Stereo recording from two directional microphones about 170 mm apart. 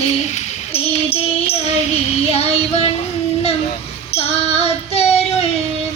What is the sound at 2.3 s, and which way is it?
Child singing, 35° left (ahead or behind).